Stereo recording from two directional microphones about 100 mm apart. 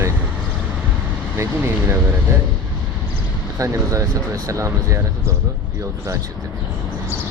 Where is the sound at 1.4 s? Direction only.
25° right (ahead or behind).